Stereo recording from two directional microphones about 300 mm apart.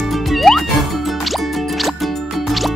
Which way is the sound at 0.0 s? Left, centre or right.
Centre.